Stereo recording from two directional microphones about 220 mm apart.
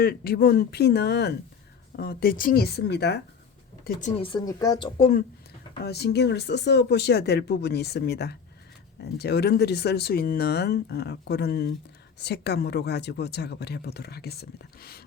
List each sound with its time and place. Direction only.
0.0 s speech: 45° left (ahead or behind)
4.2 s speech: 20° left (ahead or behind)
4.9 s speech: 35° left (ahead or behind)
5.8 s speech: 45° left (ahead or behind)